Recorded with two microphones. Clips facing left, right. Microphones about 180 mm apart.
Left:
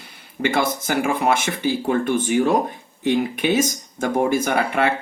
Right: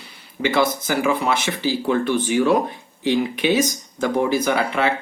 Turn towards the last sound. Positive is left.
turn(degrees=55)  # may be behind; listen again after turning